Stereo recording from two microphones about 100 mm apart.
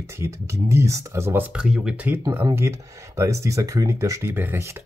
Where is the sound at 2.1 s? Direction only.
20° right (ahead or behind).